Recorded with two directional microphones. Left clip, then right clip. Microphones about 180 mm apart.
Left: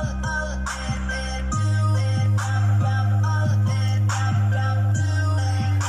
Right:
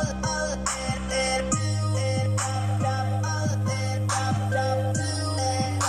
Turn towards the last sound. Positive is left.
turn(degrees=-25)  # may be behind; listen again after turning